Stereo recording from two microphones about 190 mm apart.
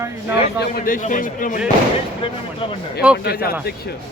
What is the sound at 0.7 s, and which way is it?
Speech, 45° left (ahead or behind).